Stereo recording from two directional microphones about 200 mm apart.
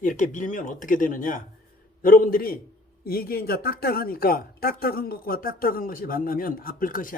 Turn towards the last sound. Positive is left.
turn(degrees=45)  # may be behind; listen again after turning